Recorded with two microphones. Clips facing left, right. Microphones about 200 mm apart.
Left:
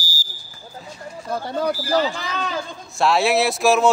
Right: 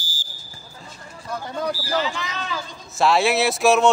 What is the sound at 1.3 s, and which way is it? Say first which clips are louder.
Speech: left 4 dB; 35° left (ahead or behind).